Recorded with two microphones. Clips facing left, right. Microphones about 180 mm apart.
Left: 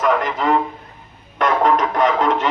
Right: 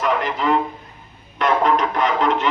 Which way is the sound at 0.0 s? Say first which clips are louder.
Left 2 dB; 45° left (ahead or behind).